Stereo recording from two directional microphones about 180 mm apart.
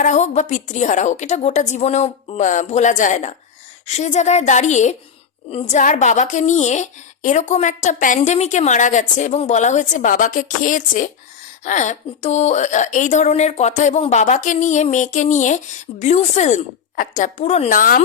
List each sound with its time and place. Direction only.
0.0 s a woman's voice: 40° left (ahead or behind)